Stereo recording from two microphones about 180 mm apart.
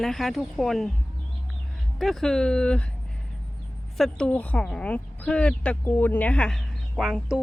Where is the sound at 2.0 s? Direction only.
Centre (ahead or behind).